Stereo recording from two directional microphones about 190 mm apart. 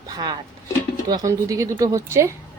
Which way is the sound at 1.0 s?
20° right (ahead or behind).